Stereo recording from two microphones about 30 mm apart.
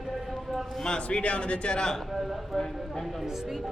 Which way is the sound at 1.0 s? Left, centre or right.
Left.